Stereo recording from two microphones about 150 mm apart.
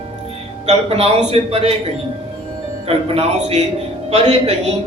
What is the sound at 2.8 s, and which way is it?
Speech, 45° right (ahead or behind).